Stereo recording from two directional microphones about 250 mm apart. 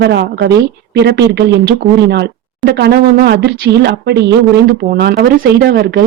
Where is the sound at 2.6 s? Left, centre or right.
Right.